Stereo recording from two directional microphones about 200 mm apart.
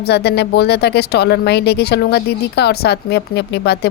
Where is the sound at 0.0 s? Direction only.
55° left (ahead or behind).